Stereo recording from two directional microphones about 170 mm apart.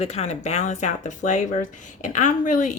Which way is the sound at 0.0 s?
40° left (ahead or behind).